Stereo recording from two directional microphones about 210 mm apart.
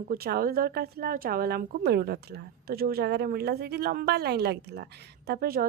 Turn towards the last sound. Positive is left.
turn(degrees=-45)  # may be behind; listen again after turning